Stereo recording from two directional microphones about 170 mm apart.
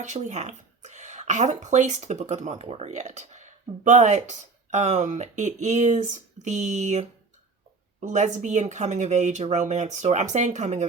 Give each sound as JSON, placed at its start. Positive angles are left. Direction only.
{"t": 0.0, "sound": "speech", "side_deg": -45}
{"t": 8.0, "sound": "speech", "side_deg": -45}